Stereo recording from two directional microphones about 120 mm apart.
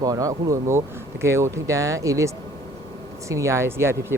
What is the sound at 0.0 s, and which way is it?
A man's voice, 30° right (ahead or behind).